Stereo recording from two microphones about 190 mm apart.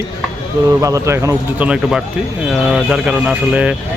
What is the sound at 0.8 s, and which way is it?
Speech, 15° right (ahead or behind).